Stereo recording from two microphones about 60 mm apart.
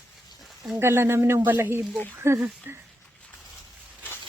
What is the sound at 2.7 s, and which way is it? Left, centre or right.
Speech, right.